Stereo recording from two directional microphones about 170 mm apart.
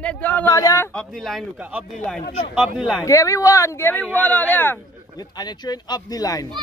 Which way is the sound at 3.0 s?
20° left (ahead or behind).